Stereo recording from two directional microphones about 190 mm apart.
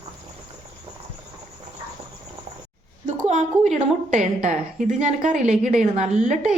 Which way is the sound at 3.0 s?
40° right (ahead or behind).